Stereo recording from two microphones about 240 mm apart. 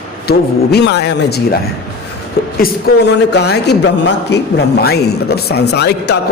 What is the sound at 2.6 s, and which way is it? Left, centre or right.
A woman's voice, left.